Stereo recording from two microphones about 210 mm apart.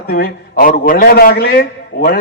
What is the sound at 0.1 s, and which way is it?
A man's voice, 45° left (ahead or behind).